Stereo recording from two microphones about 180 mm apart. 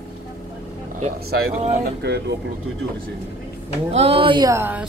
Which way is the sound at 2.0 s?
65° right (ahead or behind).